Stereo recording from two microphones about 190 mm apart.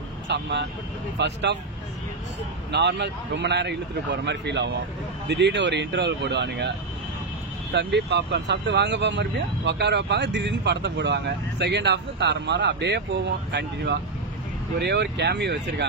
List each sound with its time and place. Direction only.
0.3 s speech: 65° right (ahead or behind)
2.7 s speech: 60° right (ahead or behind)
7.7 s speech: 65° right (ahead or behind)